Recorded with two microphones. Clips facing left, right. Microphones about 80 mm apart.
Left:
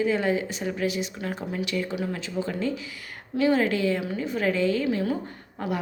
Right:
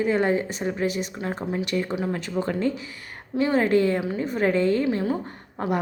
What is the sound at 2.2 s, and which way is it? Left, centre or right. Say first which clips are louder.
Speech: right 3 dB; right.